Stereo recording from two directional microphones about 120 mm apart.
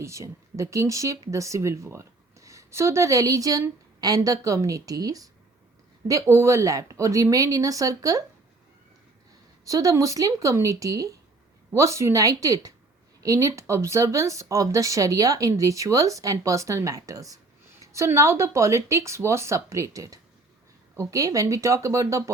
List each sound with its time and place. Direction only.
0.0 s speech: 25° right (ahead or behind)
9.6 s speech: 30° right (ahead or behind)